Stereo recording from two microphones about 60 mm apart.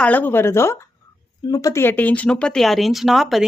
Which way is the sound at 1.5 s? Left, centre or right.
Left.